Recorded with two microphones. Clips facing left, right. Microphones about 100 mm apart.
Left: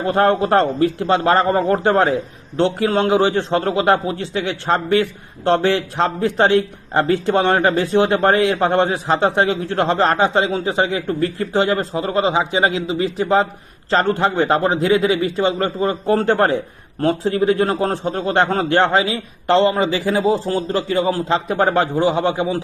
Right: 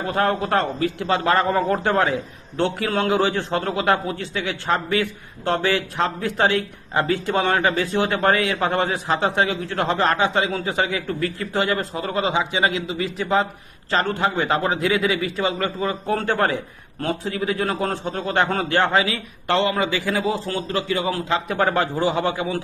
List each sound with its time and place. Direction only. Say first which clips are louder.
0.1 s a man's voice: left 6 dB; 35° left (ahead or behind)